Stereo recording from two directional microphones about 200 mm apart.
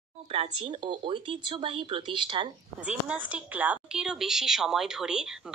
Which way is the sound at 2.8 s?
5° right (ahead or behind).